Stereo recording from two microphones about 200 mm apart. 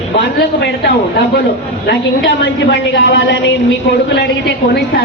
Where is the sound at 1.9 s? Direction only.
55° left (ahead or behind).